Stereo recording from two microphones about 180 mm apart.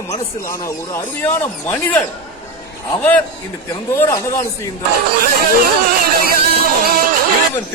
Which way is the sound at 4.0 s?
15° left (ahead or behind).